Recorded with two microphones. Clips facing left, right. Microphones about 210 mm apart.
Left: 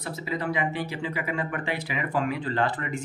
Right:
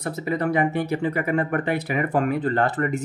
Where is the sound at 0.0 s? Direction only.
50° right (ahead or behind).